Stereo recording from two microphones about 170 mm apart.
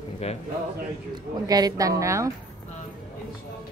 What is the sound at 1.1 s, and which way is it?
A woman's voice, 20° right (ahead or behind).